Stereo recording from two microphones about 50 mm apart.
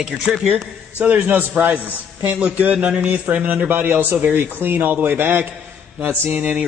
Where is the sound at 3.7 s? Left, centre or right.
Right.